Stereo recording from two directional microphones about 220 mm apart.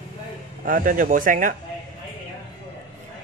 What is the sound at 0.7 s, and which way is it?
Speech, 40° right (ahead or behind).